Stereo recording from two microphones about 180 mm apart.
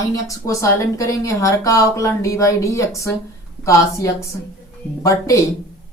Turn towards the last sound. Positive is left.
turn(degrees=20)  # may be behind; listen again after turning